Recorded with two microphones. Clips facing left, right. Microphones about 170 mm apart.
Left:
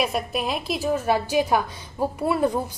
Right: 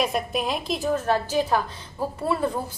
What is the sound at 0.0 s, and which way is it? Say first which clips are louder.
A woman's voice: even; centre (ahead or behind).